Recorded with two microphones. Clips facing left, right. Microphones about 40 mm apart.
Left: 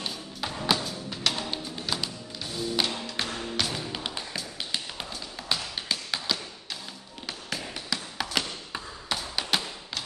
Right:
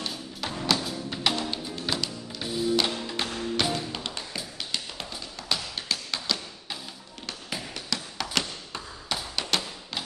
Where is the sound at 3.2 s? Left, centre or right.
Centre.